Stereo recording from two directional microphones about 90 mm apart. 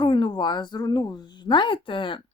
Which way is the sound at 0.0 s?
60° left (ahead or behind).